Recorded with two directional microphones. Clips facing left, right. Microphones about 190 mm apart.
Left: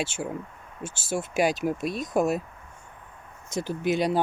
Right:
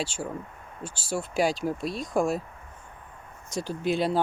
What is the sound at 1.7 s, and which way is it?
Speech, 50° left (ahead or behind).